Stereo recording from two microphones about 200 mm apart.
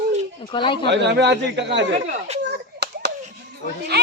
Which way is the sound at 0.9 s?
60° right (ahead or behind).